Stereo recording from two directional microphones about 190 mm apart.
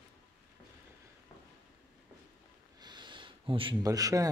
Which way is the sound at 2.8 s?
25° right (ahead or behind).